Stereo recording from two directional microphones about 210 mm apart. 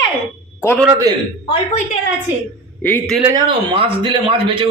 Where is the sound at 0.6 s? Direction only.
10° left (ahead or behind).